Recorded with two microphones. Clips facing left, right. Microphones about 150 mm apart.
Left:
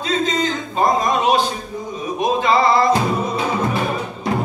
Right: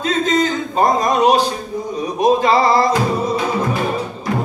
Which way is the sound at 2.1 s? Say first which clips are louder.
Right 3 dB; 40° right (ahead or behind).